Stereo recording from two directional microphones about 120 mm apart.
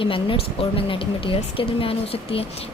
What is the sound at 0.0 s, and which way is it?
Speech, 50° left (ahead or behind).